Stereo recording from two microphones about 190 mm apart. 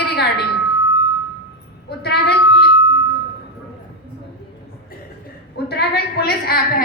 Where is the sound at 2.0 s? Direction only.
60° left (ahead or behind).